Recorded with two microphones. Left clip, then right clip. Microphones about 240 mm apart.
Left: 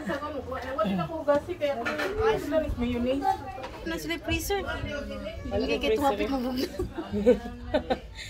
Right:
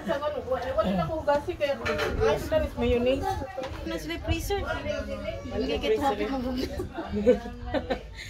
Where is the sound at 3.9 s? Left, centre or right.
Left.